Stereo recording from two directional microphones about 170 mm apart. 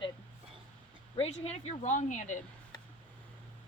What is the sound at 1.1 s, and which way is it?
A woman's voice, 40° left (ahead or behind).